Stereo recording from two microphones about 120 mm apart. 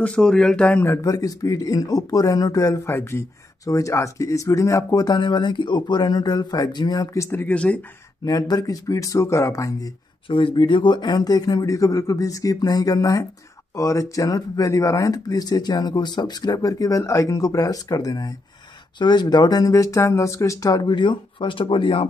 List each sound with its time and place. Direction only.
0.0 s speech: 10° left (ahead or behind)
0.8 s speech: 25° left (ahead or behind); by 7.8 s 10° left (ahead or behind)
8.3 s speech: 30° left (ahead or behind)
10.2 s speech: 45° left (ahead or behind)